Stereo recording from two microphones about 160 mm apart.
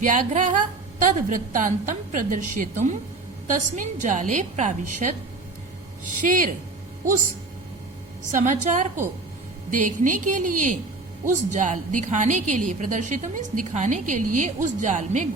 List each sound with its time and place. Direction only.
0.0 s a woman's voice: 55° right (ahead or behind)
6.2 s a woman's voice: 55° right (ahead or behind)
8.3 s a woman's voice: 55° right (ahead or behind)